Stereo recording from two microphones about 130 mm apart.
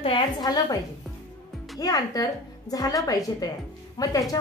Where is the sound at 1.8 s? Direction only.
30° left (ahead or behind).